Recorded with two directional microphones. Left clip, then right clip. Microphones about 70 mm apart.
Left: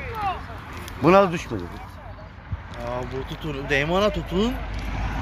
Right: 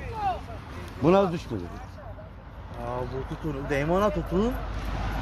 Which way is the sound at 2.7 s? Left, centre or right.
Left.